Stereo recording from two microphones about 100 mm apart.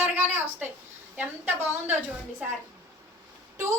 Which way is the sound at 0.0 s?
20° right (ahead or behind).